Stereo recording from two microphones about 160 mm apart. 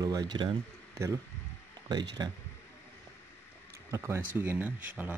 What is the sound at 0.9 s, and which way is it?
Speech, 20° right (ahead or behind).